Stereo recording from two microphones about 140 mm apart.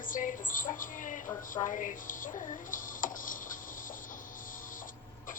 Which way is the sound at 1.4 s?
70° left (ahead or behind).